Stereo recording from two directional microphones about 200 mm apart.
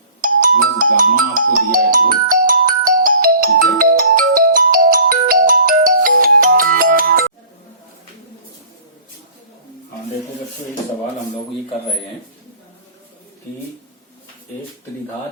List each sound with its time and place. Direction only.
0.2 s music: 45° right (ahead or behind)